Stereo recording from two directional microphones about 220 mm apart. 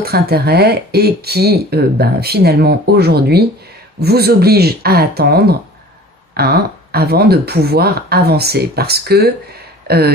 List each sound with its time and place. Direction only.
0.0 s speech: 45° right (ahead or behind)